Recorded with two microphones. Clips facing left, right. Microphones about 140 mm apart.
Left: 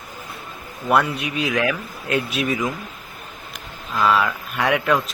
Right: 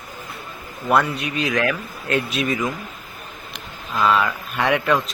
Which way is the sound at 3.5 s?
Centre (ahead or behind).